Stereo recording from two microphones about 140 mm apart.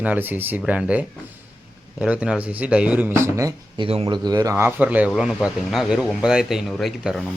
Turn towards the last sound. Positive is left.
turn(degrees=-5)  # may be behind; listen again after turning